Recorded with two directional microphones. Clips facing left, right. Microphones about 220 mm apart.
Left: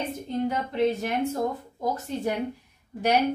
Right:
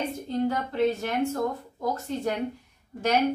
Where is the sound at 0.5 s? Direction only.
15° left (ahead or behind).